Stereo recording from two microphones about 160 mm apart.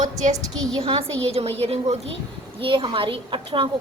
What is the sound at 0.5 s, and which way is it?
Speech, 5° left (ahead or behind).